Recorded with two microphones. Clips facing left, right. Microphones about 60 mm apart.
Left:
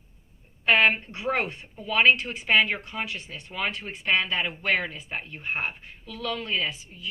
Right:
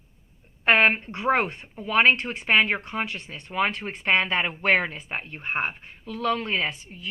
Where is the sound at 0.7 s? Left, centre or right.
Right.